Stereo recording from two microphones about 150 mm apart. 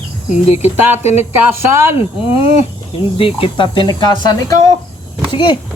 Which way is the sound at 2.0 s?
40° left (ahead or behind).